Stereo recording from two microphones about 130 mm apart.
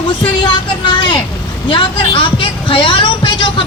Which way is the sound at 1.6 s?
40° left (ahead or behind).